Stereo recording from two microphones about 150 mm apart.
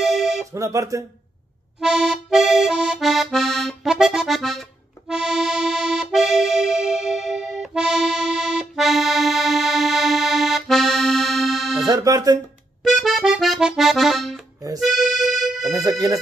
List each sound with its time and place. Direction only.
0.0 s music: 5° right (ahead or behind)
0.5 s speech: 20° right (ahead or behind)
1.8 s accordion: 5° right (ahead or behind)
11.9 s speech: 25° right (ahead or behind)
12.8 s accordion: centre (ahead or behind)
14.8 s music: centre (ahead or behind)
15.7 s speech: 25° right (ahead or behind)